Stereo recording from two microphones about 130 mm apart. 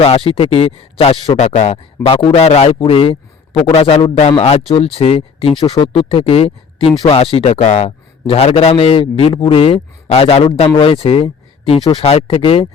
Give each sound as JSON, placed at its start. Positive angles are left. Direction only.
{"t": 0.0, "sound": "a man's voice", "side_deg": 50}
{"t": 2.7, "sound": "a man's voice", "side_deg": 45}